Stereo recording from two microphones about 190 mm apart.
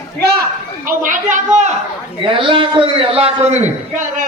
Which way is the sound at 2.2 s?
25° right (ahead or behind).